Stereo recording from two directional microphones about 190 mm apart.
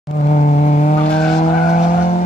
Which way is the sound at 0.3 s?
40° left (ahead or behind).